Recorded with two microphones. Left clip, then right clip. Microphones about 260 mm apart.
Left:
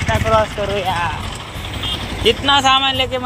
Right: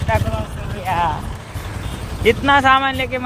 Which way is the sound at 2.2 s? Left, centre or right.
Centre.